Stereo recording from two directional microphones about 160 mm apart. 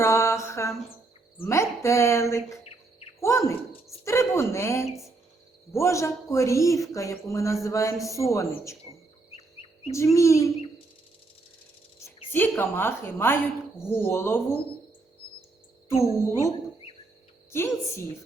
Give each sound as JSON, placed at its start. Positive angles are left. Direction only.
{"t": 0.0, "sound": "mantra", "side_deg": 15}
{"t": 1.4, "sound": "a woman's voice", "side_deg": 15}
{"t": 4.9, "sound": "speech", "side_deg": 0}
{"t": 5.7, "sound": "a man's voice", "side_deg": 20}
{"t": 9.3, "sound": "chirp", "side_deg": 40}
{"t": 9.9, "sound": "a man's voice", "side_deg": 20}
{"t": 12.3, "sound": "a woman's voice", "side_deg": 10}
{"t": 17.5, "sound": "a woman's voice", "side_deg": 15}